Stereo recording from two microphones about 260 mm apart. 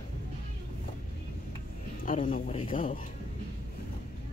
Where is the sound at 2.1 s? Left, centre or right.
Left.